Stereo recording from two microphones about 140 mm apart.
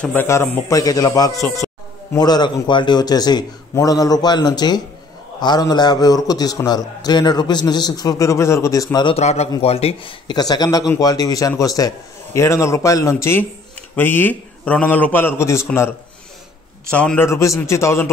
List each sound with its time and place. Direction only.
0.0 s a man's voice: 15° left (ahead or behind)
9.0 s a man's voice: 50° left (ahead or behind); by 15.6 s 20° left (ahead or behind)
16.9 s a man's voice: 10° left (ahead or behind)
17.3 s a man's voice: 20° left (ahead or behind)